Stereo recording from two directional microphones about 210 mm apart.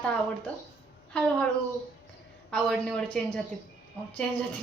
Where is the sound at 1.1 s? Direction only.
5° left (ahead or behind).